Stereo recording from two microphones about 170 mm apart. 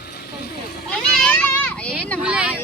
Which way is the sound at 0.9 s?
5° left (ahead or behind).